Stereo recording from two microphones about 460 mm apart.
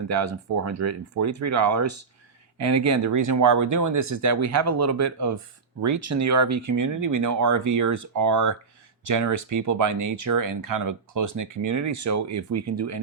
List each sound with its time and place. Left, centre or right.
0.1 s speech: right